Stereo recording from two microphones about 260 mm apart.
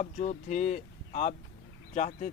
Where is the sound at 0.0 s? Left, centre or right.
Left.